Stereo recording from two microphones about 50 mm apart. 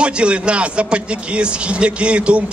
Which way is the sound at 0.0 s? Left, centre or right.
Right.